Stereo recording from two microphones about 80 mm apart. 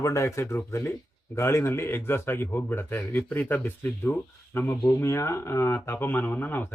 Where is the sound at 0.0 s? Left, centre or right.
Left.